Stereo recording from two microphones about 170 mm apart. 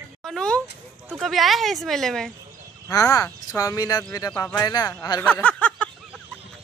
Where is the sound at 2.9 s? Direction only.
20° left (ahead or behind).